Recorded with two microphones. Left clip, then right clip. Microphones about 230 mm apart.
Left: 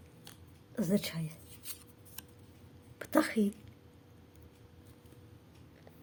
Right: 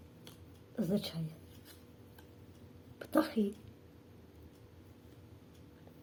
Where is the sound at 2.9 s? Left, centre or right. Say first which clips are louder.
Left 2 dB; left.